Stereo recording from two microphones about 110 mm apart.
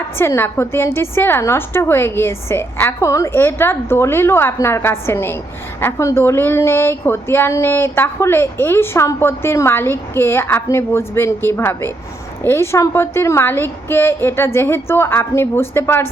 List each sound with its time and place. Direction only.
0.2 s a woman's voice: 20° left (ahead or behind)